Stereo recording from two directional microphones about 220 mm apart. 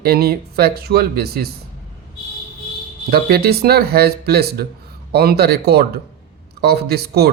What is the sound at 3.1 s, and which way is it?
Speech, 45° right (ahead or behind).